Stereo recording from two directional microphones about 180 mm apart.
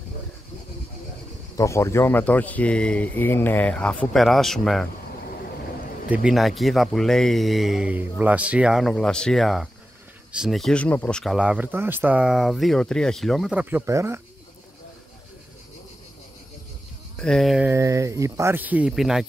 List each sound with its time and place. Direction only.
1.6 s speech: 15° left (ahead or behind)
6.0 s speech: 5° right (ahead or behind)
17.2 s speech: centre (ahead or behind)
17.7 s speech: 15° right (ahead or behind)